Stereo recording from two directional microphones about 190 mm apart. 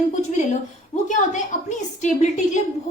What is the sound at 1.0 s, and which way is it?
Speech, 40° left (ahead or behind).